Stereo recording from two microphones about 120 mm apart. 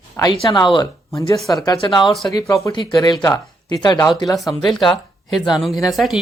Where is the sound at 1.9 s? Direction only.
40° left (ahead or behind).